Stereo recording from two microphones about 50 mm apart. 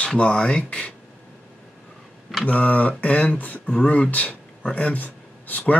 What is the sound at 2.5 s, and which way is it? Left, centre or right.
Speech, left.